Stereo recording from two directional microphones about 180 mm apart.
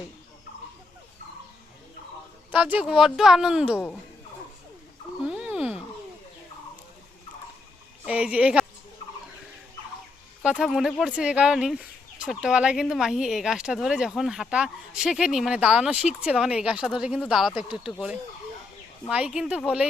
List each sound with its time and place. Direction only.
2.5 s speech: 10° right (ahead or behind)
5.2 s a sound: 5° right (ahead or behind)
8.0 s speech: 5° right (ahead or behind)
10.4 s speech: 5° right (ahead or behind)
19.0 s speech: 5° right (ahead or behind)